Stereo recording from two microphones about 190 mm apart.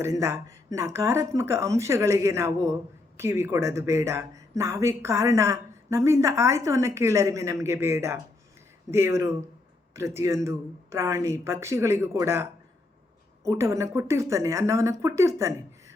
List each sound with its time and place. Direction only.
0.0 s speech: 15° right (ahead or behind)